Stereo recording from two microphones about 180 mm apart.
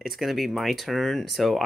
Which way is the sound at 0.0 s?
Centre (ahead or behind).